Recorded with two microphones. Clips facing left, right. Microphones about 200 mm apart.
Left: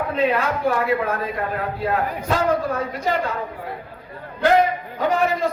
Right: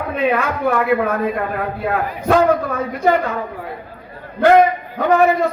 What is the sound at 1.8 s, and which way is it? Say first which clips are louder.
A man's voice: even; 60° right (ahead or behind).